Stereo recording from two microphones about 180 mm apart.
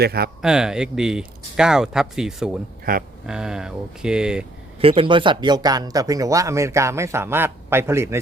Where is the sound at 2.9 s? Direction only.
55° right (ahead or behind).